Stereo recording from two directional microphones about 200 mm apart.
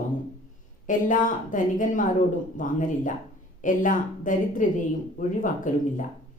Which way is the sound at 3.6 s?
40° left (ahead or behind).